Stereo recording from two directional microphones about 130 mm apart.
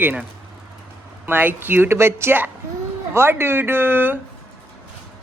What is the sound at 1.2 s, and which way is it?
Speech, 15° right (ahead or behind).